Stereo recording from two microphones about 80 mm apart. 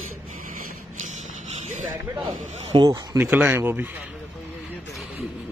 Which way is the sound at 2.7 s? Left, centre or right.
Right.